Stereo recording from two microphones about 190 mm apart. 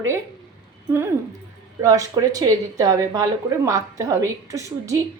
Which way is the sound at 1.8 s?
20° right (ahead or behind).